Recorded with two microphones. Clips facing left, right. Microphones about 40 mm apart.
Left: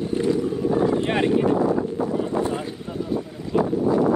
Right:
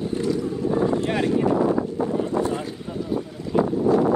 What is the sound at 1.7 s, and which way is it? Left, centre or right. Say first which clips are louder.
Wind noise: even; centre.